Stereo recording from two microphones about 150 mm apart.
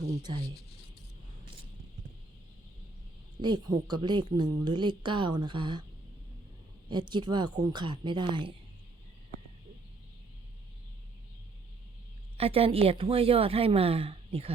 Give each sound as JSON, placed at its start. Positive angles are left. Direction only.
{"t": 3.4, "sound": "a woman's voice", "side_deg": -30}
{"t": 7.1, "sound": "a woman's voice", "side_deg": -30}
{"t": 12.4, "sound": "a woman's voice", "side_deg": -40}